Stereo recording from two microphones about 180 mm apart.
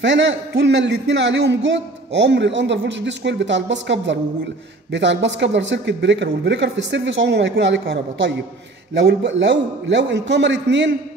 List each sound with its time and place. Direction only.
0.0 s a man's voice: 90° right